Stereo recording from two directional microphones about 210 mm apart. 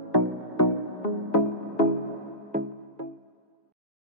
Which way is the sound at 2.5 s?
35° right (ahead or behind).